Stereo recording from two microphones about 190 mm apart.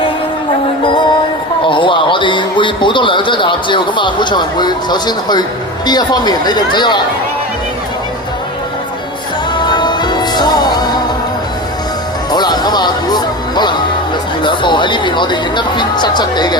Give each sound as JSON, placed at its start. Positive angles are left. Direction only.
{"t": 1.6, "sound": "a man's voice", "side_deg": 25}
{"t": 9.6, "sound": "music", "side_deg": 25}
{"t": 12.3, "sound": "music", "side_deg": 20}
{"t": 14.4, "sound": "speech", "side_deg": 25}